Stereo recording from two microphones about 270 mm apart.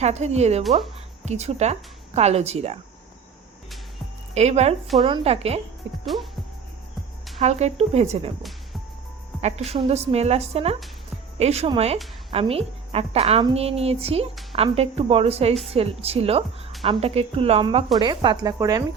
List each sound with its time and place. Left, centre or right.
0.0 s a woman's voice: right
4.4 s a woman's voice: right
7.3 s a woman's voice: right
8.4 s music: centre
9.6 s a woman's voice: right